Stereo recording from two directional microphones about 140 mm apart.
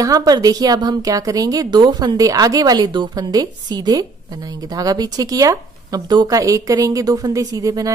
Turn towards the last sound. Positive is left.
turn(degrees=-25)  # may be behind; listen again after turning